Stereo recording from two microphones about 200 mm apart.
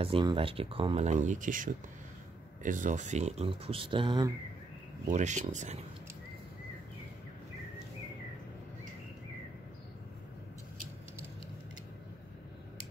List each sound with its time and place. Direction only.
0.0 s speech: 25° right (ahead or behind)
5.1 s speech: 35° right (ahead or behind)